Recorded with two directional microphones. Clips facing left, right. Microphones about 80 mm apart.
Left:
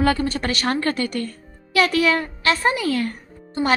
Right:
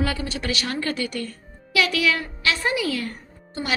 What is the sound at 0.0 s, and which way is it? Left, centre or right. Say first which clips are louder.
A woman's voice: left 6 dB; left.